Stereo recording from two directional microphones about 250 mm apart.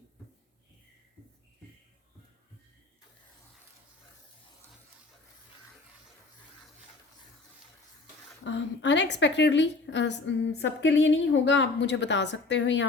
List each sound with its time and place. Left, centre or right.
8.4 s a woman's voice: left